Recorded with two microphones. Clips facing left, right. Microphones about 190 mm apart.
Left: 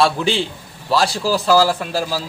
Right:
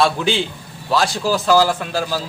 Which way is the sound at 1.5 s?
Centre (ahead or behind).